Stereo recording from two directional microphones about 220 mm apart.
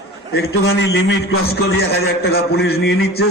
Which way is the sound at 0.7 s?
50° left (ahead or behind).